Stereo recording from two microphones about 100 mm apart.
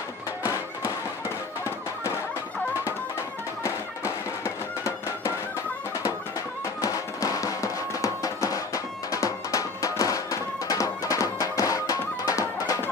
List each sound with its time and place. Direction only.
0.4 s music: 30° left (ahead or behind)
6.8 s music: 35° left (ahead or behind)